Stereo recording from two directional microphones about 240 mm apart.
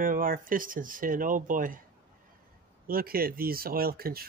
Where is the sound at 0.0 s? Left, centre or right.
Right.